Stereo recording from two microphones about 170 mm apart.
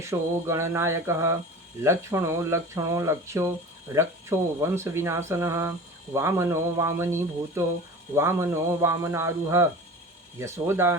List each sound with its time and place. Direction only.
0.0 s speech: 15° right (ahead or behind)